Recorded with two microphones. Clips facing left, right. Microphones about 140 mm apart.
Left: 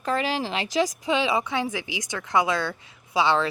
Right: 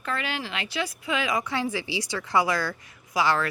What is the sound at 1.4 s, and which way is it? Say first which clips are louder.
Speech: left 1 dB; 20° left (ahead or behind).